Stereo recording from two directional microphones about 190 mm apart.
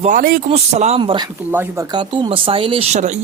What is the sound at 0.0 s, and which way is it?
Speech, 45° right (ahead or behind).